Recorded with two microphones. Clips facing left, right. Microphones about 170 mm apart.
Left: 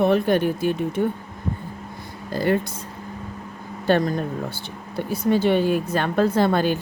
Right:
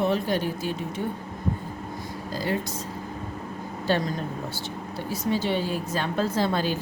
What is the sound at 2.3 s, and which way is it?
Speech, 60° left (ahead or behind).